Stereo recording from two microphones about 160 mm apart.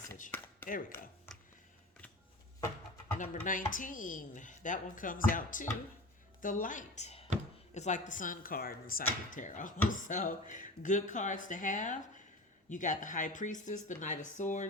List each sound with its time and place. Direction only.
0.3 s a sound: 10° left (ahead or behind)
0.7 s speech: 60° left (ahead or behind)
3.2 s speech: 55° left (ahead or behind)